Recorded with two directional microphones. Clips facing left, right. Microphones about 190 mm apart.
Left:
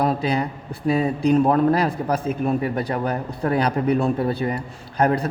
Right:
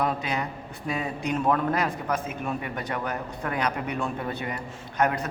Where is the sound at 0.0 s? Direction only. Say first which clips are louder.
Left 6 dB; 35° left (ahead or behind).